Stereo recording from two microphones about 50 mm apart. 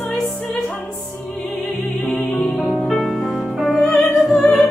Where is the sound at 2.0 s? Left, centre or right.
Centre.